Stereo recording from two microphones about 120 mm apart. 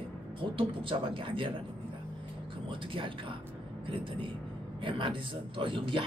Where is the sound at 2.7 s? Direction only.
45° right (ahead or behind).